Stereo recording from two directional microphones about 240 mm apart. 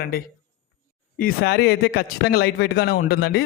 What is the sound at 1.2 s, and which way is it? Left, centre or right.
Speech, left.